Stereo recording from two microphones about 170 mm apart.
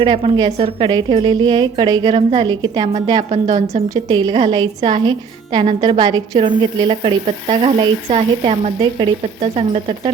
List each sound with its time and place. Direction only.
0.0 s a woman's voice: 25° right (ahead or behind)
3.9 s a woman's voice: 25° right (ahead or behind)